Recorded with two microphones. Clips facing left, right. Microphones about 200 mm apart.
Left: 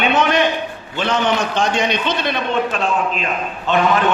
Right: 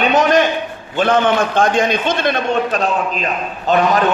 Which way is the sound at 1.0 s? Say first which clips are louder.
Right 4 dB; 50° right (ahead or behind).